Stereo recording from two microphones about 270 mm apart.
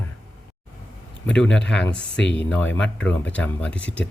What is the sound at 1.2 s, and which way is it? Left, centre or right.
Speech, centre.